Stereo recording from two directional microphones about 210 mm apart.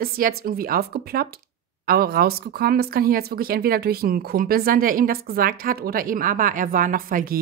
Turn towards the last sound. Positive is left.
turn(degrees=-40)  # may be behind; listen again after turning